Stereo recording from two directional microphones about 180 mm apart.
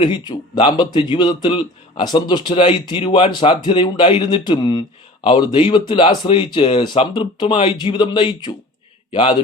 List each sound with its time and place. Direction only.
0.0 s speech: 25° left (ahead or behind)